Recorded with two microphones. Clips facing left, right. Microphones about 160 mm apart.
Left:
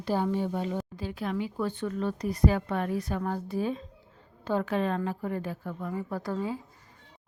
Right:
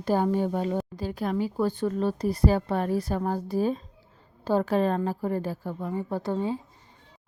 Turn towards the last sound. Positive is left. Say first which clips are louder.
# right 4 dB
turn(degrees=-25)  # may be behind; listen again after turning